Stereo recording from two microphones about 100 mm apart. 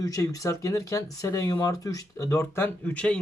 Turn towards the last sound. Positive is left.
turn(degrees=10)  # may be behind; listen again after turning